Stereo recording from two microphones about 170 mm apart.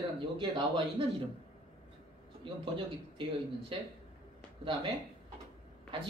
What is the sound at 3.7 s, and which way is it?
Speech, 30° right (ahead or behind).